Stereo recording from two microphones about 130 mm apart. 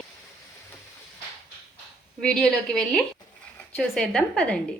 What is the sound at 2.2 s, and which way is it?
A woman's voice, 5° left (ahead or behind).